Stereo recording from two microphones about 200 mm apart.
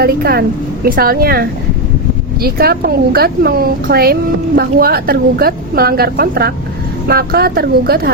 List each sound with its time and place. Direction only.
0.0 s a woman's voice: 50° right (ahead or behind)